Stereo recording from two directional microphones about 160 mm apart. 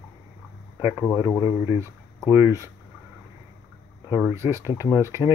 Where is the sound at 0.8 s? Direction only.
10° right (ahead or behind).